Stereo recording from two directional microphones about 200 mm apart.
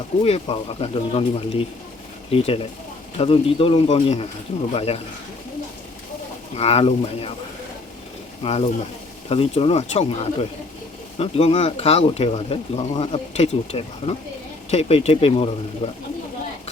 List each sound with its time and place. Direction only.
0.2 s speech: 25° left (ahead or behind)
6.6 s speech: 30° left (ahead or behind)
8.4 s speech: 30° left (ahead or behind)